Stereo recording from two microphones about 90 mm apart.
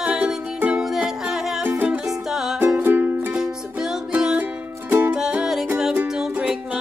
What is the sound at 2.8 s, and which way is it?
Music, 25° right (ahead or behind).